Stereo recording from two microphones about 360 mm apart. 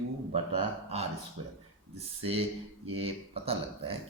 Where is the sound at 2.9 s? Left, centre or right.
Centre.